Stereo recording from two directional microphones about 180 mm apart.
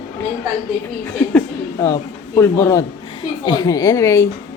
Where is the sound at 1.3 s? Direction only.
15° left (ahead or behind).